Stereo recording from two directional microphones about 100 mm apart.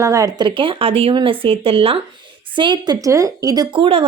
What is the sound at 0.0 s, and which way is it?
Speech, 30° right (ahead or behind).